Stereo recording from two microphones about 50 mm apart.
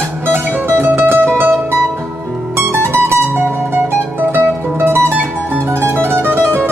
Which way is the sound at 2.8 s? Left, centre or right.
Right.